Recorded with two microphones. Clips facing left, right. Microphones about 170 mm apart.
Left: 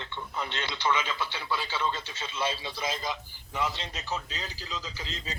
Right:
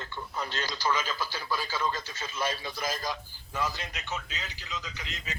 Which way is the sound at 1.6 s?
25° left (ahead or behind).